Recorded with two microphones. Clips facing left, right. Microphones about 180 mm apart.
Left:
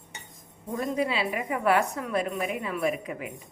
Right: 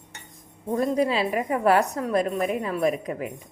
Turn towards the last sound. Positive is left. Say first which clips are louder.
# right 4 dB
turn(degrees=-40)  # may be behind; listen again after turning